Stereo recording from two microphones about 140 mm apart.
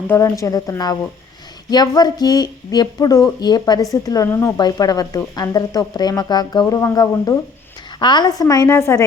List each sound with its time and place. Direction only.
0.1 s speech: 20° left (ahead or behind)